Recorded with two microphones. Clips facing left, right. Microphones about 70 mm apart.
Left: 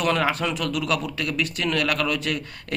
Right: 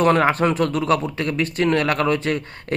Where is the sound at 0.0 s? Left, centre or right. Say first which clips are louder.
Right 6 dB; right.